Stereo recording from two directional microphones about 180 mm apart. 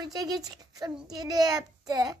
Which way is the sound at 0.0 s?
20° right (ahead or behind).